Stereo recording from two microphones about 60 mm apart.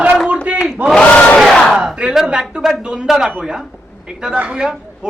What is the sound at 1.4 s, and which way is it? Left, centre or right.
Battle cry, centre.